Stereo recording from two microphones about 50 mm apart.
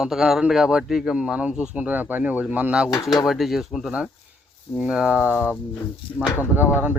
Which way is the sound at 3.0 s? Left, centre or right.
Centre.